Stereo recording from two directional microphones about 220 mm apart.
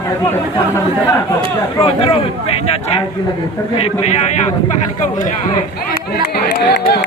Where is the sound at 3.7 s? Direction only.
30° left (ahead or behind).